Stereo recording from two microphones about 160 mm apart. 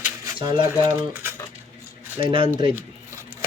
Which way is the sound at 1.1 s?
15° right (ahead or behind).